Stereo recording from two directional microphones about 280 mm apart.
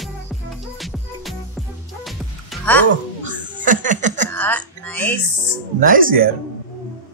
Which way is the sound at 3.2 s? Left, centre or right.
Right.